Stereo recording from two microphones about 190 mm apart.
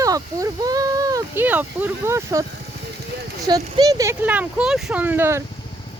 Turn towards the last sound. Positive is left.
turn(degrees=-10)  # may be behind; listen again after turning